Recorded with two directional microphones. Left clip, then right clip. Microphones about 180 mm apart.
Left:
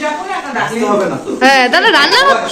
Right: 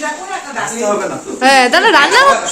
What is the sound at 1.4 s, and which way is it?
Speech, 15° right (ahead or behind).